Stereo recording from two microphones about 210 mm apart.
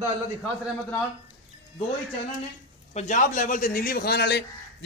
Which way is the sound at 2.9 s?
35° left (ahead or behind).